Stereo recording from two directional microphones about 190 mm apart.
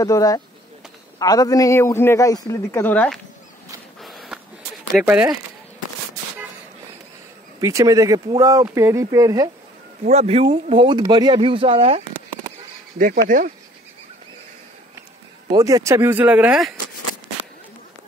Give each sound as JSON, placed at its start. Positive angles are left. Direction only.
{"t": 0.0, "sound": "a man's voice", "side_deg": 20}
{"t": 4.0, "sound": "a sound", "side_deg": 0}
{"t": 4.9, "sound": "speech", "side_deg": -5}
{"t": 7.6, "sound": "speech", "side_deg": -15}
{"t": 10.0, "sound": "speech", "side_deg": -35}
{"t": 12.9, "sound": "speech", "side_deg": -45}
{"t": 15.5, "sound": "speech", "side_deg": -20}